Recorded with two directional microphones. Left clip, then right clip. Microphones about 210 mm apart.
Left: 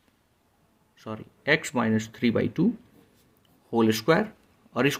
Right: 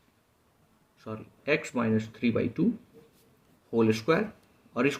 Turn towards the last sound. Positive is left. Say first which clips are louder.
# left 3 dB
turn(degrees=45)  # may be behind; listen again after turning